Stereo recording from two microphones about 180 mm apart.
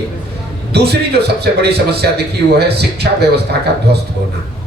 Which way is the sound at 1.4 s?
65° right (ahead or behind).